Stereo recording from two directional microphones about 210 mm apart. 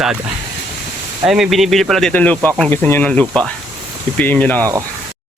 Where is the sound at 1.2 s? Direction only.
Centre (ahead or behind).